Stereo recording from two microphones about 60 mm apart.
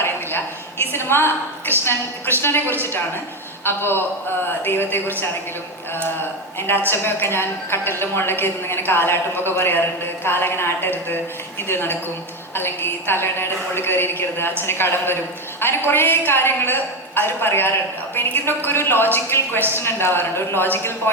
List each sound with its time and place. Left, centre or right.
0.0 s a woman's voice: left
6.6 s a woman's voice: left